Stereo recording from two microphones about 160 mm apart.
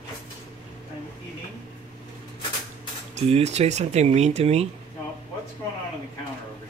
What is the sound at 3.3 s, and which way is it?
Speech, 40° right (ahead or behind).